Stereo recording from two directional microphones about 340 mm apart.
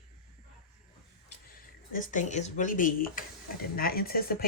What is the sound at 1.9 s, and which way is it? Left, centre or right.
Speech, left.